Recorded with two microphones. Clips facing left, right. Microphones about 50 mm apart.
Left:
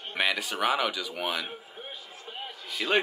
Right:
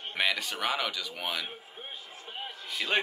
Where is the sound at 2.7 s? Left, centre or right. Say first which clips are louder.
Left 3 dB; left.